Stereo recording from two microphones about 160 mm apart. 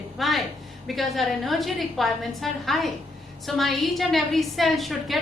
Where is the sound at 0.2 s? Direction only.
Centre (ahead or behind).